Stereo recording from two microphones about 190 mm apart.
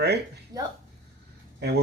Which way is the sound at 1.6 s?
60° right (ahead or behind).